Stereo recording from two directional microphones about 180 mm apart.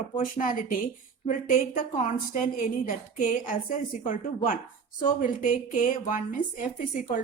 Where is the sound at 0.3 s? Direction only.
50° left (ahead or behind).